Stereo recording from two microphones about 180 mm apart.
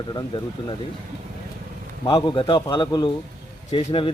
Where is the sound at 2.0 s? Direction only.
25° left (ahead or behind).